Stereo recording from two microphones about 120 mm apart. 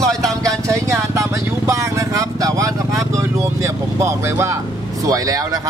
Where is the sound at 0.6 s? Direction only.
25° right (ahead or behind).